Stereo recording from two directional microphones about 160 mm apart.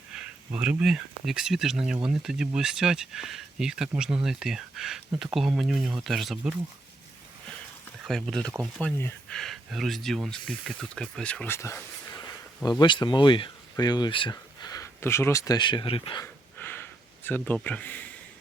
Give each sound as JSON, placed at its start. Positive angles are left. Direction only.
{"t": 0.1, "sound": "speech", "side_deg": -5}
{"t": 8.0, "sound": "speech", "side_deg": 0}
{"t": 16.2, "sound": "a sound", "side_deg": 15}